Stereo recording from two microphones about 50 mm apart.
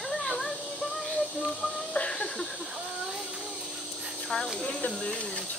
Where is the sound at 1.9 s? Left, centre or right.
Centre.